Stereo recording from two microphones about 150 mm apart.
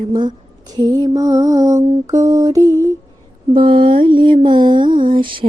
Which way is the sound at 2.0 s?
20° right (ahead or behind).